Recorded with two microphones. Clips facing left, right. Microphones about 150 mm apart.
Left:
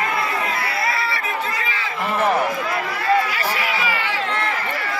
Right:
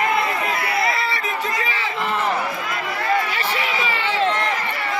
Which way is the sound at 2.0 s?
60° left (ahead or behind).